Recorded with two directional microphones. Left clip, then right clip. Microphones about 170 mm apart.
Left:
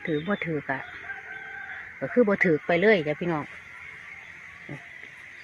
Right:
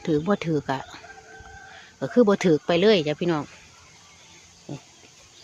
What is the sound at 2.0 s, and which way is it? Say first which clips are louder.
Speech: right 2 dB; 35° right (ahead or behind).